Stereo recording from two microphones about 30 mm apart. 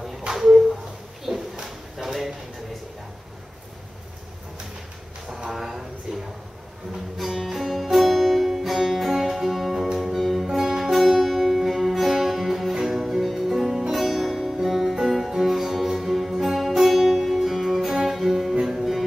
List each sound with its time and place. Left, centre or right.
0.3 s a sound: centre
1.6 s drawer open or close: centre
5.5 s a sound: centre
7.2 s music: centre
10.5 s music: centre
10.8 s music: centre
13.9 s music: centre